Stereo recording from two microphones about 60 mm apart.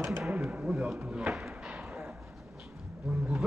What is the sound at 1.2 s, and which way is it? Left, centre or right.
Speech, centre.